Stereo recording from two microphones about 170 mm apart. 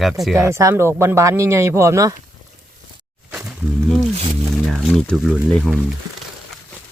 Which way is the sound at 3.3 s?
10° right (ahead or behind).